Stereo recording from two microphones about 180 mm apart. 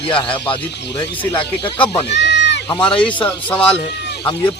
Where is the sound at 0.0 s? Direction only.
30° left (ahead or behind).